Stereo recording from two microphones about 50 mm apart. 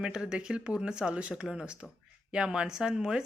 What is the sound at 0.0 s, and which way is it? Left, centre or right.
Speech, centre.